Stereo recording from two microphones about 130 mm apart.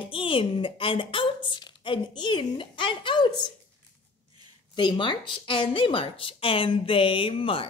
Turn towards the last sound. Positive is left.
turn(degrees=45)  # may be behind; listen again after turning